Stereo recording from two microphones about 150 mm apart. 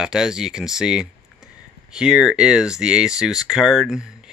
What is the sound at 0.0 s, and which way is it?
Speech, 5° right (ahead or behind).